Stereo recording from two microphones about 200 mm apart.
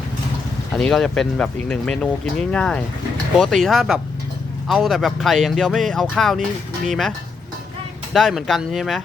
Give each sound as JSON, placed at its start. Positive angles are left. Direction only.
{"t": 0.7, "sound": "speech", "side_deg": 5}
{"t": 8.1, "sound": "speech", "side_deg": 0}